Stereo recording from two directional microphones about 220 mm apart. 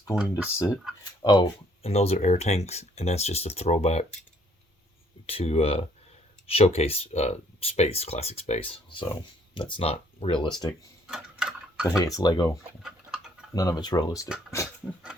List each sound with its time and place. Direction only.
0.2 s speech: 5° right (ahead or behind)
1.2 s speech: 20° left (ahead or behind)
5.2 s speech: 25° left (ahead or behind)
11.0 s a sound: 5° right (ahead or behind)
11.9 s speech: 15° left (ahead or behind)
12.8 s a sound: centre (ahead or behind)
13.5 s speech: 15° left (ahead or behind)